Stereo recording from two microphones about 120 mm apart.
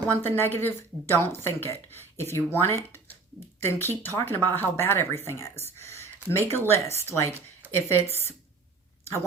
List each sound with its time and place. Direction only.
0.2 s speech: 20° left (ahead or behind)